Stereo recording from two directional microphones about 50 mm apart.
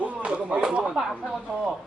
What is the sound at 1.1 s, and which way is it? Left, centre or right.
Speech, right.